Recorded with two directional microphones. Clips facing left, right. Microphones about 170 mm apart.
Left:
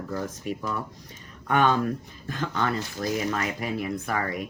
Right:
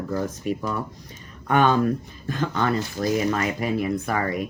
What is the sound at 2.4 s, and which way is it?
Speech, 20° right (ahead or behind).